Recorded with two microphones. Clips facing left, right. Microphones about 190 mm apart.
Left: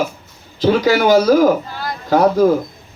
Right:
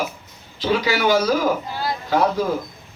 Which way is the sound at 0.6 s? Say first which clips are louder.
Left 6 dB; 45° left (ahead or behind).